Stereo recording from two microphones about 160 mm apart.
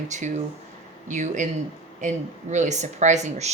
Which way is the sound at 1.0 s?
50° right (ahead or behind).